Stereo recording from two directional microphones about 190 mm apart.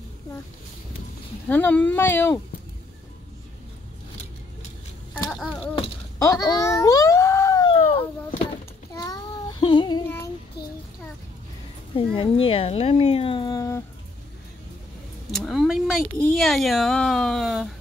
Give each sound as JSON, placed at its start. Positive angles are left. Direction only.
{"t": 1.5, "sound": "speech", "side_deg": 10}
{"t": 5.3, "sound": "speech", "side_deg": 0}
{"t": 6.1, "sound": "a sound", "side_deg": 15}
{"t": 8.9, "sound": "child singing", "side_deg": 20}
{"t": 10.0, "sound": "child singing", "side_deg": 10}
{"t": 10.6, "sound": "a sound", "side_deg": 60}
{"t": 12.1, "sound": "speech", "side_deg": 30}
{"t": 15.3, "sound": "speech", "side_deg": 0}